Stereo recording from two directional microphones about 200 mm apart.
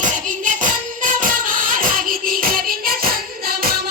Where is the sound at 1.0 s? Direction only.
45° right (ahead or behind).